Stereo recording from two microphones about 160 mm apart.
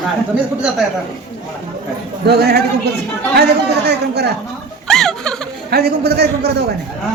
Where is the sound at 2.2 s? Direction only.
80° right.